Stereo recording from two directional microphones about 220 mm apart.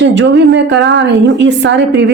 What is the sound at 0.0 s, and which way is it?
A woman's voice, 55° right (ahead or behind).